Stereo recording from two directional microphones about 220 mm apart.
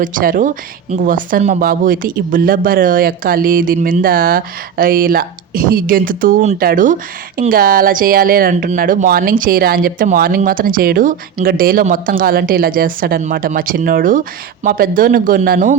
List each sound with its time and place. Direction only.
0.0 s speech: 40° right (ahead or behind)